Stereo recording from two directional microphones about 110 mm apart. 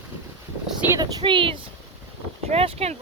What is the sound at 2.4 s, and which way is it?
Speech, 65° right (ahead or behind).